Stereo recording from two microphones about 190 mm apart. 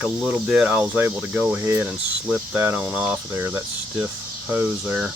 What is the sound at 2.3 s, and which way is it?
Speech, centre (ahead or behind).